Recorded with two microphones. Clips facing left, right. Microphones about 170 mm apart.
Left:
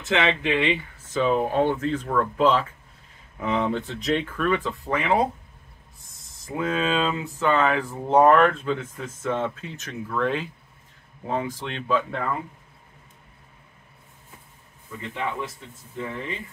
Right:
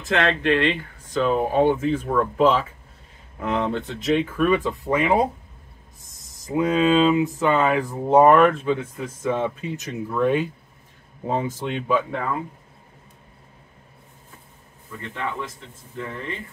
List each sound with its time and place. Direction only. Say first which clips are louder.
0.0 s speech: right 2 dB; centre (ahead or behind); by 5.2 s 15° right (ahead or behind)
6.4 s speech: right 6 dB; 20° right (ahead or behind)